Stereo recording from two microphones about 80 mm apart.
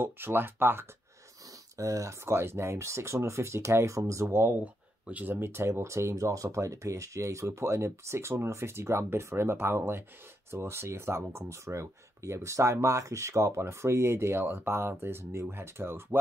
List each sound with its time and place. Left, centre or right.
0.0 s speech: right
1.8 s speech: right
5.0 s speech: right